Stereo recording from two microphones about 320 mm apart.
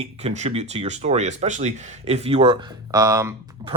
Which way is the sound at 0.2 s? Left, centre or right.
Right.